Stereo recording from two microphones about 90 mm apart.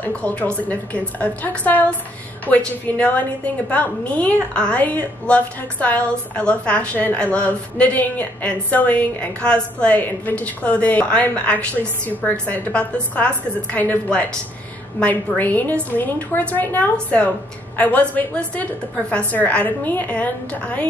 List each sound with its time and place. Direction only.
0.0 s a woman's voice: 15° left (ahead or behind)